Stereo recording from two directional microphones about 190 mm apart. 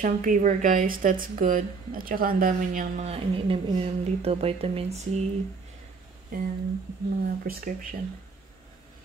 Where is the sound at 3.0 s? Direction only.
30° right (ahead or behind).